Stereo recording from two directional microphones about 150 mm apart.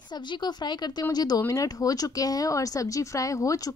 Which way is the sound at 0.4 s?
30° left (ahead or behind).